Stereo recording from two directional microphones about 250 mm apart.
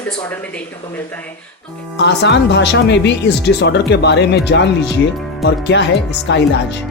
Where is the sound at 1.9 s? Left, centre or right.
Left.